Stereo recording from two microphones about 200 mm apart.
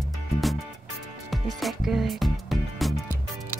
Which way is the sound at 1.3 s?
Centre (ahead or behind).